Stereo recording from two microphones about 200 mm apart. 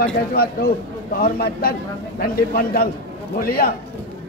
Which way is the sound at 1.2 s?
50° left (ahead or behind).